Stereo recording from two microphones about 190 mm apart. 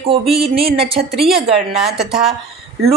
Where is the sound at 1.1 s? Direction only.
Centre (ahead or behind).